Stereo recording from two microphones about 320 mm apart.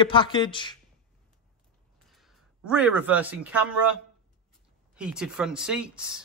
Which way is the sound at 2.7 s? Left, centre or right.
Centre.